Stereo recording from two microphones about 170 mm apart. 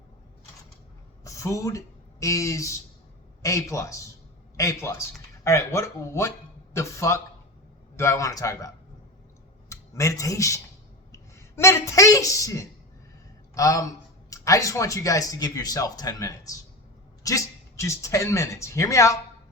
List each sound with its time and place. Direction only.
1.2 s a woman's voice: 20° left (ahead or behind)